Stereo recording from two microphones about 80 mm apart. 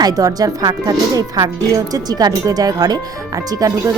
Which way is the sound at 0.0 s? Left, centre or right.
Right.